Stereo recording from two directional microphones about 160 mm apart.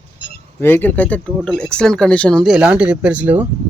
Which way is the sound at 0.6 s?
15° left (ahead or behind).